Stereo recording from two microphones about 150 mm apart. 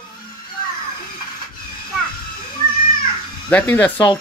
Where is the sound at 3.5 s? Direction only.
10° left (ahead or behind).